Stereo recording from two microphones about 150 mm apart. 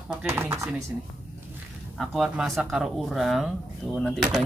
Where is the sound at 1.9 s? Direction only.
Centre (ahead or behind).